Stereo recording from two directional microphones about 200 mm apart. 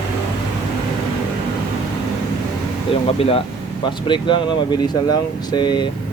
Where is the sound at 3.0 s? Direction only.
30° left (ahead or behind).